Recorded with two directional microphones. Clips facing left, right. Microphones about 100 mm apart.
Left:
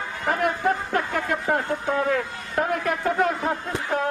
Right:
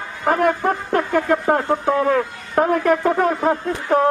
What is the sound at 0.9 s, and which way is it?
A man's voice, 45° right (ahead or behind).